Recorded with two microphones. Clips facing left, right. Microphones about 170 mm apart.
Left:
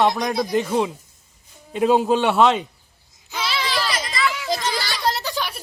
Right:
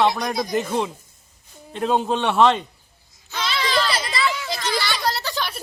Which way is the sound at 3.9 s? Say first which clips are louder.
Even; 30° right (ahead or behind).